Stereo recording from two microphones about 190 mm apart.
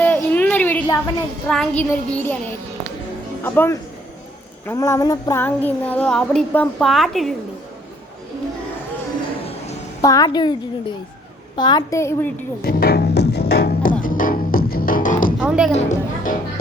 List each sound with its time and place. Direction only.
0.0 s a sound: 10° left (ahead or behind)
3.4 s a sound: 10° left (ahead or behind)
9.4 s music: 30° left (ahead or behind)
10.0 s a woman's voice: 20° left (ahead or behind)
12.6 s music: 55° left (ahead or behind)
15.4 s music: 5° right (ahead or behind)
15.7 s speech: 35° left (ahead or behind)